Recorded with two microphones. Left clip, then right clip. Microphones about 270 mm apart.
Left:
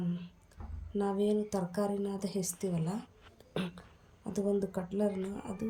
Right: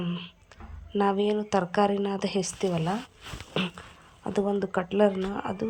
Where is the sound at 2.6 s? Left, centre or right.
Right.